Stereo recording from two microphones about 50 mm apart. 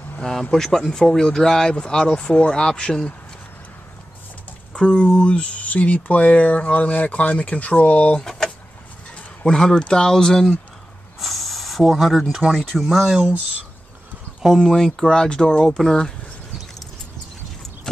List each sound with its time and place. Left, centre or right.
0.2 s speech: centre
4.7 s speech: centre
8.2 s a sound: centre
9.1 s speech: centre
11.1 s a sound: centre
12.3 s speech: centre
14.6 s speech: centre